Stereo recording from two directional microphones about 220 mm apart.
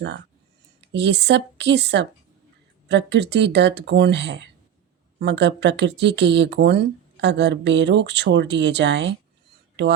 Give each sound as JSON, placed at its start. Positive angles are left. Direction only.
{"t": 0.9, "sound": "speech", "side_deg": -50}